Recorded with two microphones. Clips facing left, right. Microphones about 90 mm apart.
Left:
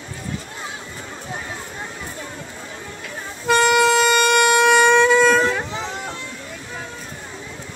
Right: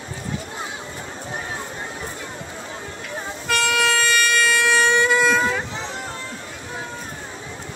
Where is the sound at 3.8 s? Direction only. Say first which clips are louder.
Left 5 dB; 20° left (ahead or behind).